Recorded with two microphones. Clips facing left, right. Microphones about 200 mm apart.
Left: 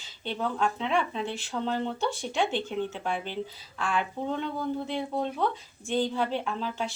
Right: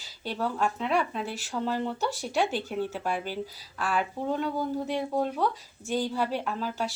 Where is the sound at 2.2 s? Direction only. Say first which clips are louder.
Even; 5° right (ahead or behind).